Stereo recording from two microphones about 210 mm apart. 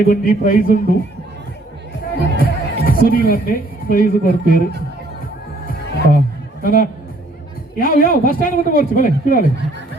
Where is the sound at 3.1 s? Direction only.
45° left (ahead or behind).